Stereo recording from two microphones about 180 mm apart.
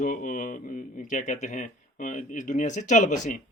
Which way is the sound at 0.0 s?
45° left (ahead or behind).